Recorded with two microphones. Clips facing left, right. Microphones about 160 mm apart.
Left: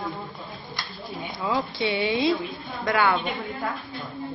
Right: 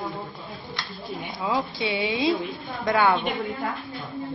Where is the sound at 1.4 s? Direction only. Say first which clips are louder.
Left 1 dB; 15° right (ahead or behind).